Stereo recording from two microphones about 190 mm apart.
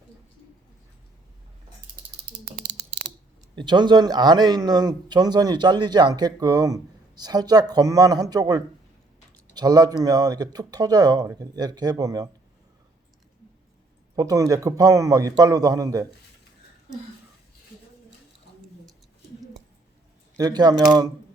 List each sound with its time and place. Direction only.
3.5 s speech: 25° right (ahead or behind)
14.2 s speech: 15° right (ahead or behind)
20.3 s speech: 20° right (ahead or behind)